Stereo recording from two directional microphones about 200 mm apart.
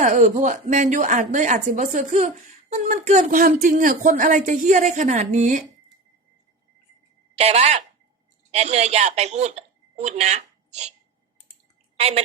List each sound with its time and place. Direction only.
0.0 s speech: 35° right (ahead or behind)
7.3 s a woman's voice: 35° right (ahead or behind)
11.9 s a woman's voice: 30° right (ahead or behind)